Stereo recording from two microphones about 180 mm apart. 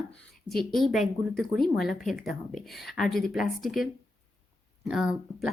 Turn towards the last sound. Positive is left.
turn(degrees=-5)  # may be behind; listen again after turning